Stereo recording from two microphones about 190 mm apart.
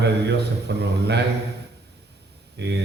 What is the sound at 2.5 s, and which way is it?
Speech, 65° right (ahead or behind).